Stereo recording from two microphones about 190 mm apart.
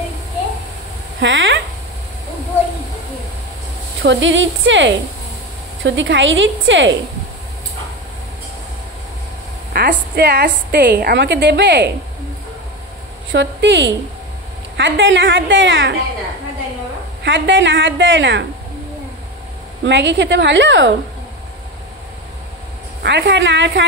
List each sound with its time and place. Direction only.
1.2 s speech: 80° right
4.0 s a woman's voice: 75° right (ahead or behind); by 7.0 s 90° right
9.7 s a woman's voice: 60° right (ahead or behind)
13.3 s a woman's voice: 70° right (ahead or behind)
17.2 s a woman's voice: 75° right (ahead or behind)
19.9 s a woman's voice: 70° right (ahead or behind)
23.0 s a woman's voice: 65° right (ahead or behind)